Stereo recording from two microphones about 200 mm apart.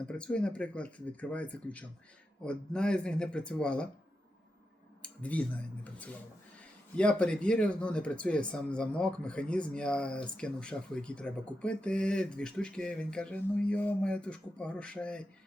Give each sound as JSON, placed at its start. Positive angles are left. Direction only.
{"t": 0.1, "sound": "speech", "side_deg": 5}
{"t": 5.0, "sound": "speech", "side_deg": 5}